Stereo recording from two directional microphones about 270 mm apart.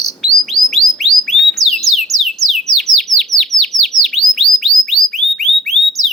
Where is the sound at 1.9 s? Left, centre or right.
Centre.